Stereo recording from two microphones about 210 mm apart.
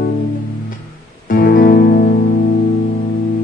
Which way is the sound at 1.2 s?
45° left (ahead or behind).